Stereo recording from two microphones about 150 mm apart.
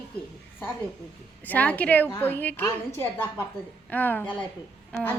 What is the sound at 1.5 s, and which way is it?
A woman's voice, 10° left (ahead or behind).